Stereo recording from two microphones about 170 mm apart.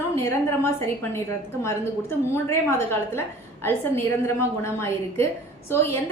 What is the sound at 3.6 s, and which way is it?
A woman's voice, 15° left (ahead or behind).